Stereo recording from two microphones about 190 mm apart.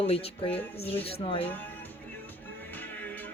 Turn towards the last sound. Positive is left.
turn(degrees=10)  # may be behind; listen again after turning